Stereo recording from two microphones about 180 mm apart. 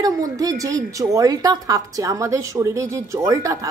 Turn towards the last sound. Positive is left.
turn(degrees=-20)  # may be behind; listen again after turning